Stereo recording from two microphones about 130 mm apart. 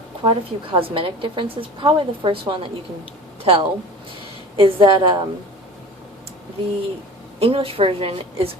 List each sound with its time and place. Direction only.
0.2 s a woman's voice: 40° right (ahead or behind)
7.3 s a woman's voice: 45° right (ahead or behind)